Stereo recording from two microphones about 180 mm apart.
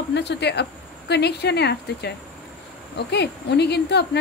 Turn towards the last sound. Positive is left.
turn(degrees=65)  # may be behind; listen again after turning